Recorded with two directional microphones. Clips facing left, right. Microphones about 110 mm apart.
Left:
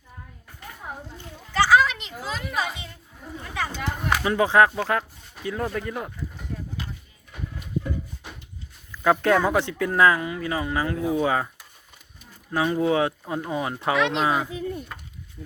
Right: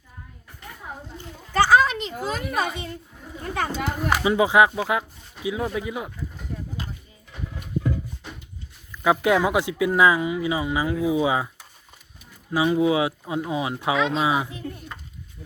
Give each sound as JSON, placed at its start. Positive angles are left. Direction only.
{"t": 1.5, "sound": "children playing", "side_deg": -45}
{"t": 3.4, "sound": "a sound", "side_deg": -40}
{"t": 4.1, "sound": "speech", "side_deg": -10}
{"t": 9.0, "sound": "speech", "side_deg": -10}
{"t": 13.9, "sound": "speech", "side_deg": 70}
{"t": 14.2, "sound": "speech", "side_deg": -10}